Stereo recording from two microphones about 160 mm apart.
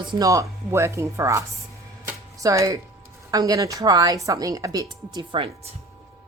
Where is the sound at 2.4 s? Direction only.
20° right (ahead or behind).